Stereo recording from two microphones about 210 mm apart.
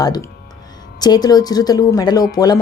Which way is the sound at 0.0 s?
20° left (ahead or behind).